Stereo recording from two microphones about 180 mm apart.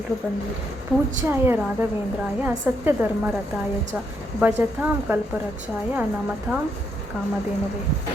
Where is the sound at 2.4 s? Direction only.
10° right (ahead or behind).